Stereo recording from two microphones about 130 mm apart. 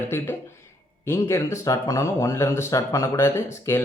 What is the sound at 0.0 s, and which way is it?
Speech, 20° left (ahead or behind).